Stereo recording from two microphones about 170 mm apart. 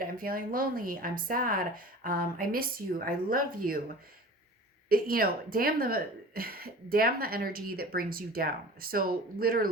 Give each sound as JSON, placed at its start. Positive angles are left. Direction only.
{"t": 0.0, "sound": "speech", "side_deg": -55}
{"t": 4.9, "sound": "speech", "side_deg": -60}